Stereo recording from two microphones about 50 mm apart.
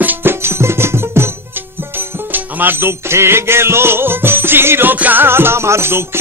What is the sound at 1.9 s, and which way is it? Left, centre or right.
Music, right.